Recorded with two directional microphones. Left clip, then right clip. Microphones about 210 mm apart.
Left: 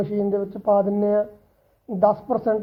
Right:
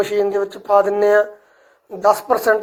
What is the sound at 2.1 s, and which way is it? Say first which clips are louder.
Speech: right 7 dB; 40° right (ahead or behind).